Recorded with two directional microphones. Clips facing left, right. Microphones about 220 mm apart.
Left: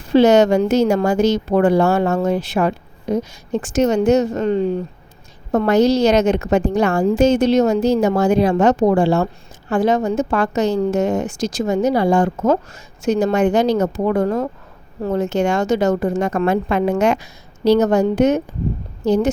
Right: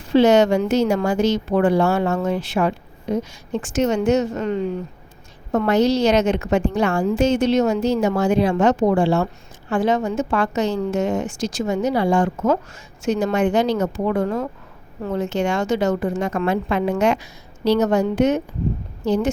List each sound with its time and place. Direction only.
0.1 s a woman's voice: 40° left (ahead or behind)